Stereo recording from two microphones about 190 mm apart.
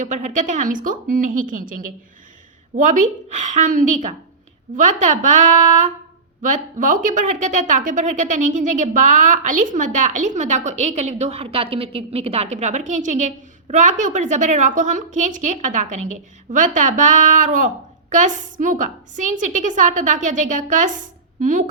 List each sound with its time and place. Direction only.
0.0 s a woman's voice: 40° right (ahead or behind)